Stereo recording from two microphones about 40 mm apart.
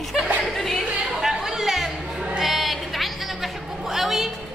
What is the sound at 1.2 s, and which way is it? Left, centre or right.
Chatter, centre.